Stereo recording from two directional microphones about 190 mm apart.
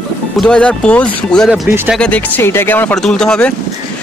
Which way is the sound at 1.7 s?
10° right (ahead or behind).